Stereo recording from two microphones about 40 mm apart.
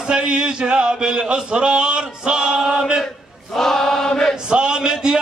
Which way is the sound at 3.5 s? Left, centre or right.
Centre.